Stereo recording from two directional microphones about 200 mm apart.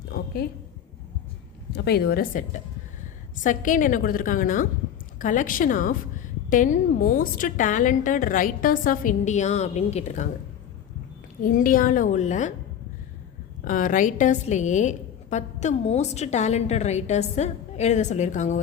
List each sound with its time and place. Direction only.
1.7 s a woman's voice: 55° left (ahead or behind); by 10.2 s 35° left (ahead or behind)
11.4 s a woman's voice: 45° left (ahead or behind)
13.7 s a woman's voice: 40° left (ahead or behind)